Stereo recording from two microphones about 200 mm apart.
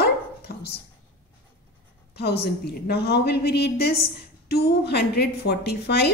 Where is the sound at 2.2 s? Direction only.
55° left (ahead or behind).